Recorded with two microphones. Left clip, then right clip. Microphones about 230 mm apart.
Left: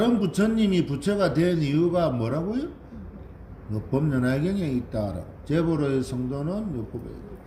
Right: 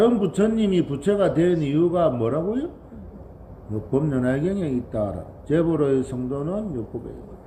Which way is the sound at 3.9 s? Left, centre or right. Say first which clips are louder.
Right 3 dB; left.